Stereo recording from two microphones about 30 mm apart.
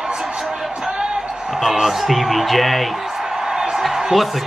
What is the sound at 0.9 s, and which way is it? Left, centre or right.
Basketball bounce, right.